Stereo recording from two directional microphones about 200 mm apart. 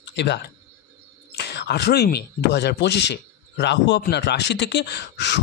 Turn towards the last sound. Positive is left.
turn(degrees=60)  # may be behind; listen again after turning